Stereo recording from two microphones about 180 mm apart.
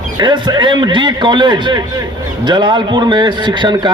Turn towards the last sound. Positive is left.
turn(degrees=-25)  # may be behind; listen again after turning